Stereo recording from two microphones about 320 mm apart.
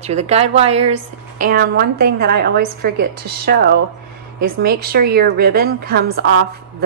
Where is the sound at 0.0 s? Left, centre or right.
Centre.